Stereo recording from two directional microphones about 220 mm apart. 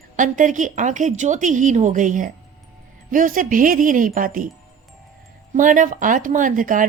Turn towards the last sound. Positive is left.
turn(degrees=-35)  # may be behind; listen again after turning